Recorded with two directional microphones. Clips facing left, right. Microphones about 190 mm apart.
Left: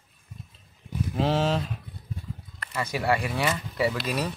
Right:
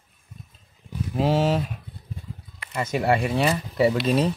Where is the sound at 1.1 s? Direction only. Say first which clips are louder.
Right 3 dB; 10° right (ahead or behind).